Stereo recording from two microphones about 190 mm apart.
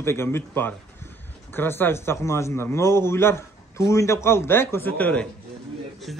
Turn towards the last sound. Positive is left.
turn(degrees=0)  # may be behind; listen again after turning